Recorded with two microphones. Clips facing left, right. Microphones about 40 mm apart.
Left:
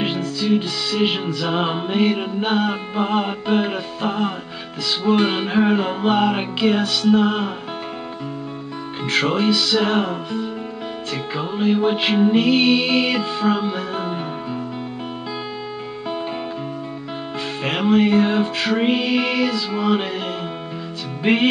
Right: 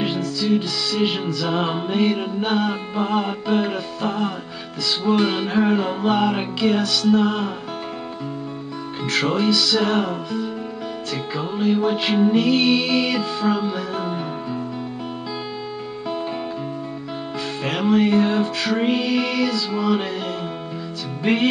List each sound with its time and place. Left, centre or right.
0.0 s music: centre
9.0 s music: centre
17.6 s music: centre
21.2 s music: left